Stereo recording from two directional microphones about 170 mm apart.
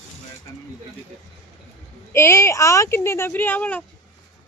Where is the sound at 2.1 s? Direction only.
15° left (ahead or behind).